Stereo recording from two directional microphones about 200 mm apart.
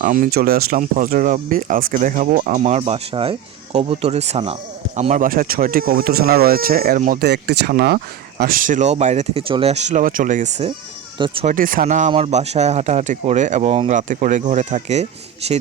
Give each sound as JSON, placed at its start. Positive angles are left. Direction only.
{"t": 0.0, "sound": "speech", "side_deg": -45}